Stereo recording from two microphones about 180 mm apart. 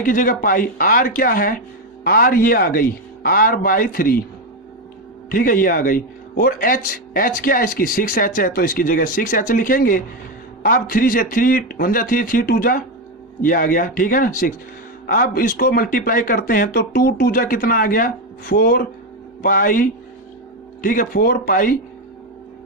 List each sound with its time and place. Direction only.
0.0 s speech: 50° left (ahead or behind)
5.3 s speech: 50° left (ahead or behind)